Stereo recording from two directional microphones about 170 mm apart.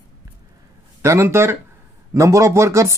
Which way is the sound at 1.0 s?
15° right (ahead or behind).